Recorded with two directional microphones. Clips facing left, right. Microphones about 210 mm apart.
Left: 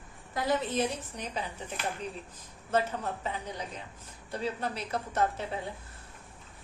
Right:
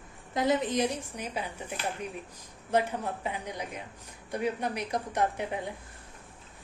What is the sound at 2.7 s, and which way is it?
A woman's voice, 10° right (ahead or behind).